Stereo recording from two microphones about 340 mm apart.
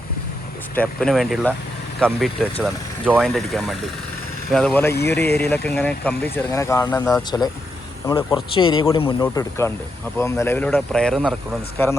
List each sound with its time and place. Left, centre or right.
0.8 s speech: centre
5.1 s speech: left
5.4 s speech: centre